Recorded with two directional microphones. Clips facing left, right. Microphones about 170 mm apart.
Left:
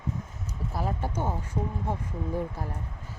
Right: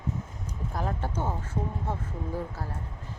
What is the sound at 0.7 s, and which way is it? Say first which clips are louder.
Speech: left 1 dB; 5° left (ahead or behind).